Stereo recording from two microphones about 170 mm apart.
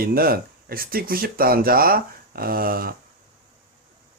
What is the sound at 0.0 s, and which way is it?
Speech, 60° right (ahead or behind).